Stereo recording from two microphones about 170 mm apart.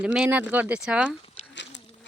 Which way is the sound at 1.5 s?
90° left.